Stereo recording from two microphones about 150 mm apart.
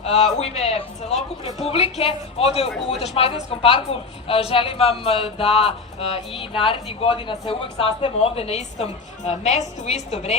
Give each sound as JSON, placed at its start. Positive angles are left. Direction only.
{"t": 0.0, "sound": "a woman's voice", "side_deg": 45}
{"t": 2.6, "sound": "speech", "side_deg": 0}
{"t": 3.0, "sound": "a woman's voice", "side_deg": 40}